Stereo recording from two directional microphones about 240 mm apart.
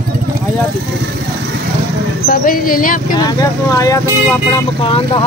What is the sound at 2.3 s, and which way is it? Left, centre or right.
Speech, left.